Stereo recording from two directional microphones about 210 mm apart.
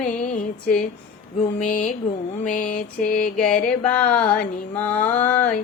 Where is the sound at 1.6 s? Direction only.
35° left (ahead or behind).